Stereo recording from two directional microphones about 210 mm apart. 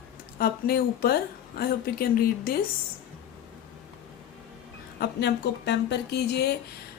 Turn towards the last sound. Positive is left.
turn(degrees=50)  # may be behind; listen again after turning